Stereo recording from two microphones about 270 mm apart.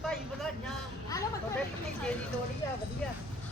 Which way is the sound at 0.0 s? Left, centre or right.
Centre.